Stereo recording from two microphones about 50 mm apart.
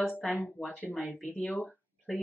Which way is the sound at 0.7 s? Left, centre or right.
Left.